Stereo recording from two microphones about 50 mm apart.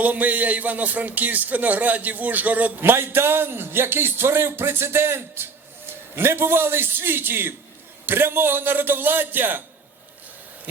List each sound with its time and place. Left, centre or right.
0.0 s a man's voice: right
2.8 s a man's voice: right